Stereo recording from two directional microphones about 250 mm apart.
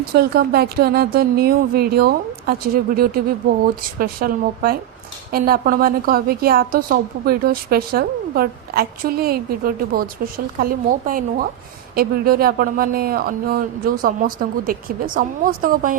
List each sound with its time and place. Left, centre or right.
0.1 s a woman's voice: right